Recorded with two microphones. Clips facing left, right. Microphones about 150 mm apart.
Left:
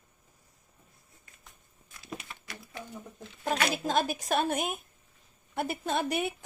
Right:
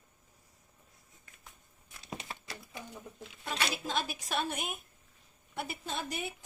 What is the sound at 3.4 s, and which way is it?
A woman's voice, 50° left (ahead or behind).